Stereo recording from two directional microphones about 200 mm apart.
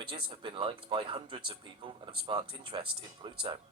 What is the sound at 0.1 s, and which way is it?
Speech, 25° right (ahead or behind).